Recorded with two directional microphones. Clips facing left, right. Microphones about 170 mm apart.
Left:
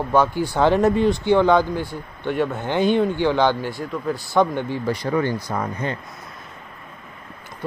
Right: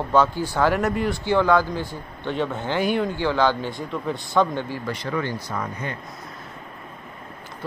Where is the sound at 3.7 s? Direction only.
5° left (ahead or behind).